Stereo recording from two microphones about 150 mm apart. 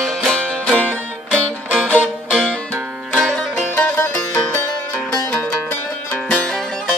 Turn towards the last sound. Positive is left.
turn(degrees=5)  # may be behind; listen again after turning